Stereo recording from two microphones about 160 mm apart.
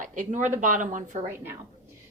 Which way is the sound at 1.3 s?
15° right (ahead or behind).